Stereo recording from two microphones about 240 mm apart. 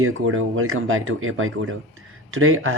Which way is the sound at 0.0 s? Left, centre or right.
Right.